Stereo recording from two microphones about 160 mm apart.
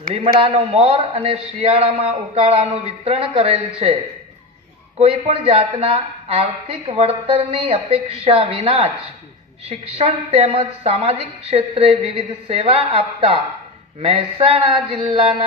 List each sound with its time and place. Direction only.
0.3 s speech: 35° right (ahead or behind)
4.9 s speech: 40° right (ahead or behind)